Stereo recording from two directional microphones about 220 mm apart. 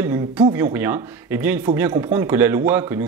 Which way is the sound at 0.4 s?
15° right (ahead or behind).